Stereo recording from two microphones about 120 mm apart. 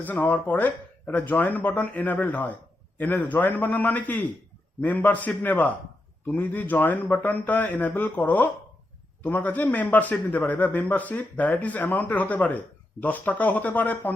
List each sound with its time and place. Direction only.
0.0 s a man's voice: 15° left (ahead or behind)